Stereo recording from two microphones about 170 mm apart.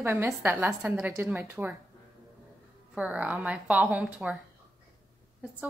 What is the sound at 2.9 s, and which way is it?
A woman's voice, 5° right (ahead or behind).